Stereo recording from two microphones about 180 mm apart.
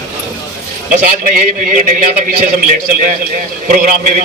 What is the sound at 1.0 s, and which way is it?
A man's voice, 50° right (ahead or behind).